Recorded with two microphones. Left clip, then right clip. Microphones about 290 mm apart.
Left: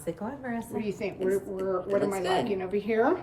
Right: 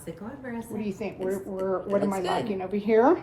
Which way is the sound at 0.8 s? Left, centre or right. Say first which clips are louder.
Left 1 dB; centre.